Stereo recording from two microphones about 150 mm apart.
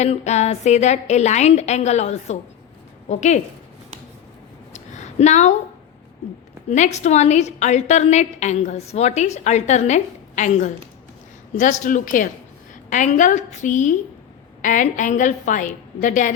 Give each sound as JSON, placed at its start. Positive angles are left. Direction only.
{"t": 0.0, "sound": "a woman's voice", "side_deg": 50}
{"t": 4.7, "sound": "a sound", "side_deg": 50}
{"t": 6.7, "sound": "a woman's voice", "side_deg": 50}